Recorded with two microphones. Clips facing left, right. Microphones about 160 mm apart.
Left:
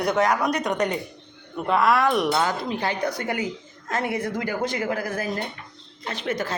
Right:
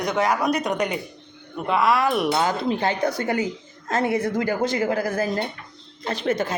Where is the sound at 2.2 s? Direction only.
20° right (ahead or behind).